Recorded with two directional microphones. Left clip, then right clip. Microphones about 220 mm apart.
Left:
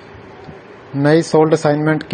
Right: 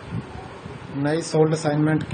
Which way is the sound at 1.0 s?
35° left (ahead or behind).